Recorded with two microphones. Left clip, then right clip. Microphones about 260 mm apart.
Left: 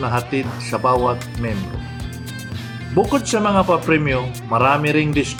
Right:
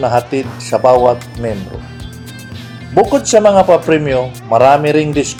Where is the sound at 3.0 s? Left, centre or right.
Centre.